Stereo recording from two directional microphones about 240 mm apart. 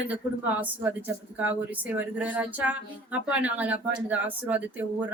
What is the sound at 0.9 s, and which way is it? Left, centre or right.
Speech, centre.